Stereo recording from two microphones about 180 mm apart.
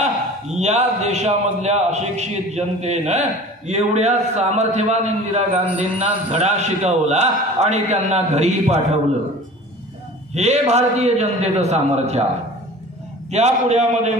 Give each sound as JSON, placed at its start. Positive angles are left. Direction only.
{"t": 0.0, "sound": "a man's voice", "side_deg": -40}
{"t": 10.3, "sound": "a man's voice", "side_deg": -35}
{"t": 13.3, "sound": "a man's voice", "side_deg": -40}